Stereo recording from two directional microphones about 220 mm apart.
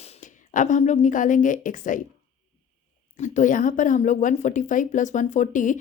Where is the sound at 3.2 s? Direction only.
35° left (ahead or behind).